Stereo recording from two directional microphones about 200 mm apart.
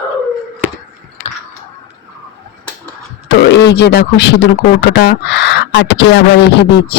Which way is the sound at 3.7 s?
55° left (ahead or behind).